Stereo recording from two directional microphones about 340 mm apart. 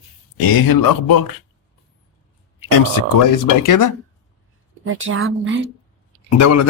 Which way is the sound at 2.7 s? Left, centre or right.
Left.